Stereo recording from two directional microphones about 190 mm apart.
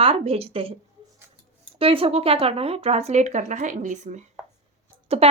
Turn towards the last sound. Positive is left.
turn(degrees=-30)  # may be behind; listen again after turning